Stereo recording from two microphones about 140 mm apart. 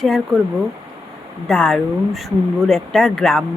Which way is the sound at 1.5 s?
5° left (ahead or behind).